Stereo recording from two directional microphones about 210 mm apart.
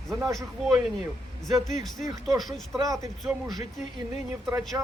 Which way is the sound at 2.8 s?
15° right (ahead or behind).